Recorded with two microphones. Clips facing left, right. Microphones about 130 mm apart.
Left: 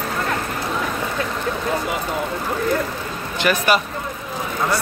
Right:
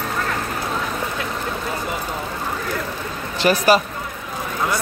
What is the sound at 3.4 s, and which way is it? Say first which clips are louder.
Speech: right 3 dB; 35° right (ahead or behind).